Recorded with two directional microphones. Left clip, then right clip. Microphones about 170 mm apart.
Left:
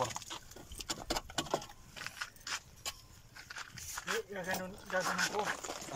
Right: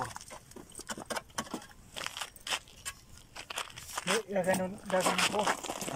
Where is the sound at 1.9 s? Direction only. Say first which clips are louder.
Right 5 dB; 40° right (ahead or behind).